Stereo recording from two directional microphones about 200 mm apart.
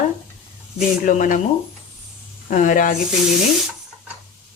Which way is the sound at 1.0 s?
40° left (ahead or behind).